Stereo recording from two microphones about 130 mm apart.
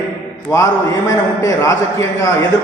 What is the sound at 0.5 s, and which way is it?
A man's voice, 25° left (ahead or behind).